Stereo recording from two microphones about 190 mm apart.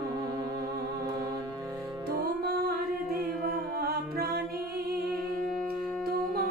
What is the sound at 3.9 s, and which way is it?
Music, 55° right (ahead or behind).